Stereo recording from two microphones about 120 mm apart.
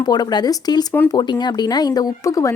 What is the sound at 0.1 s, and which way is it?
Speech, 35° left (ahead or behind).